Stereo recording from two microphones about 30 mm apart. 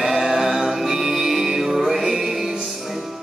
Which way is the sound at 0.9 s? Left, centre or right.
Centre.